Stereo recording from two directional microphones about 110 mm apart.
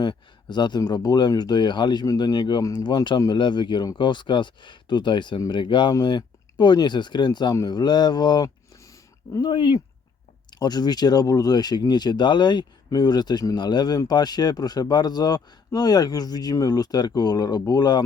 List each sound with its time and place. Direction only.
0.0 s a sound: 40° left (ahead or behind)
0.8 s speech: 35° left (ahead or behind)
9.4 s speech: 45° left (ahead or behind)